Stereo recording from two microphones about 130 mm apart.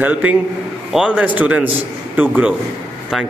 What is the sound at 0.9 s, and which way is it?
A man's voice, 10° right (ahead or behind).